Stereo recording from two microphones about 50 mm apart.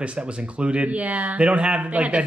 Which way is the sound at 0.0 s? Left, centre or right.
Right.